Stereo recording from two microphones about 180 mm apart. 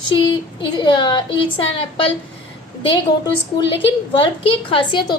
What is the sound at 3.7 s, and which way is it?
A woman's voice, 30° left (ahead or behind).